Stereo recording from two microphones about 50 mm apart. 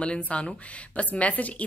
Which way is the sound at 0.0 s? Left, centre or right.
Left.